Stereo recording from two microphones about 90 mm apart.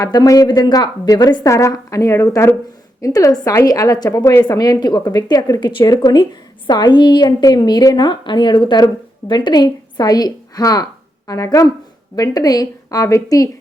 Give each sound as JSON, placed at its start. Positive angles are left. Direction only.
{"t": 0.0, "sound": "a woman's voice", "side_deg": 45}
{"t": 4.2, "sound": "a woman's voice", "side_deg": 35}
{"t": 4.4, "sound": "a woman's voice", "side_deg": 45}
{"t": 5.8, "sound": "a woman's voice", "side_deg": 45}